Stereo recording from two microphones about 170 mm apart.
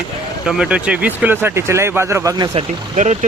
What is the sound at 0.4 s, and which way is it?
Speech, 5° right (ahead or behind).